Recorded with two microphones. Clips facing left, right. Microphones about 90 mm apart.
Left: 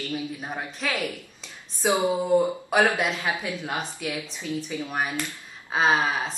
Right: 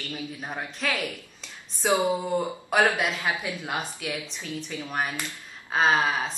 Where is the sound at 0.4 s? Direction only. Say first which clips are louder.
Left 1 dB; 5° left (ahead or behind).